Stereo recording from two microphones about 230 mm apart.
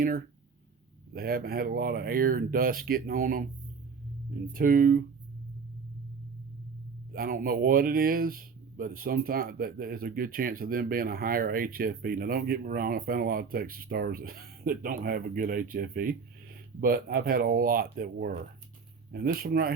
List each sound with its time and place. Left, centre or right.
0.0 s speech: right
4.5 s speech: right
7.1 s speech: right